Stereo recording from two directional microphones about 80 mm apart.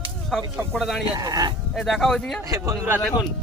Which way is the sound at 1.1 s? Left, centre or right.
Right.